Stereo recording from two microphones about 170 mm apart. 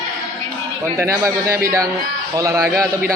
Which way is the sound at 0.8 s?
15° right (ahead or behind).